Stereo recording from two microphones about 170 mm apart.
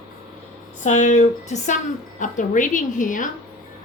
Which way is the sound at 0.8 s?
45° left (ahead or behind).